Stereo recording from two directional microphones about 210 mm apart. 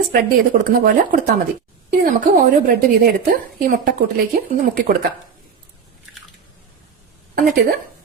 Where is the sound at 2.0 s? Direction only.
40° right (ahead or behind).